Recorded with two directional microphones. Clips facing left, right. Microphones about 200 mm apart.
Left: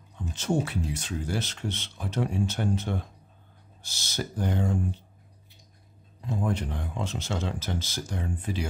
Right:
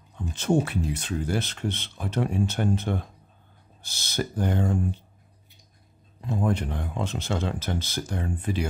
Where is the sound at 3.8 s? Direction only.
55° right (ahead or behind).